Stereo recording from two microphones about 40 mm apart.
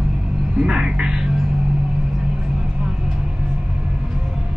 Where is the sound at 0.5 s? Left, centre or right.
Centre.